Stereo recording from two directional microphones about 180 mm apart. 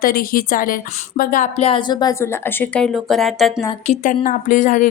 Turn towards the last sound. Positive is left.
turn(degrees=45)  # may be behind; listen again after turning